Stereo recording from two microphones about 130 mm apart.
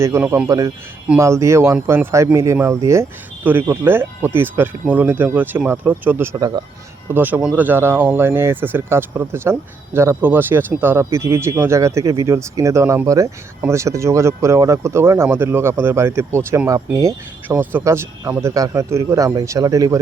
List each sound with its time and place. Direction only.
0.0 s speech: 20° right (ahead or behind)